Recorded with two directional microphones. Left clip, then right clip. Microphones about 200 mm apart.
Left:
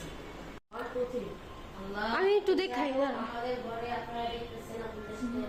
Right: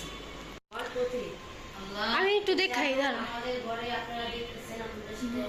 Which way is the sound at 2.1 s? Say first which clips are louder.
Right 1 dB; 20° left (ahead or behind).